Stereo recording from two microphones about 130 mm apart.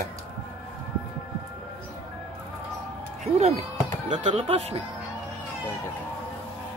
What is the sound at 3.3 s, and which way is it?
Speech, 55° right (ahead or behind).